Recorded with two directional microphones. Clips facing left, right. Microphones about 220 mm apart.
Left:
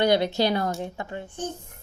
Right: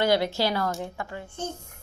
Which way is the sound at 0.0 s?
20° left (ahead or behind).